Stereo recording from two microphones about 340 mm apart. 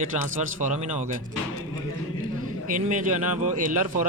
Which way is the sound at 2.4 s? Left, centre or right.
Right.